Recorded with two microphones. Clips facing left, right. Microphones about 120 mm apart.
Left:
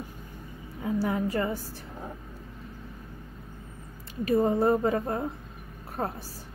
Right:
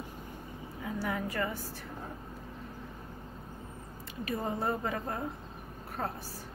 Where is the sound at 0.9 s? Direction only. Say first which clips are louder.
Left 6 dB; 30° left (ahead or behind).